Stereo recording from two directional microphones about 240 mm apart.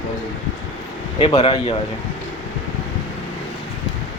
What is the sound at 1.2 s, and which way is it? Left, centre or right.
Speech, left.